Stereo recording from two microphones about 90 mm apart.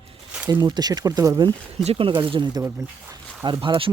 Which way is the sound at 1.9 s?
80° right.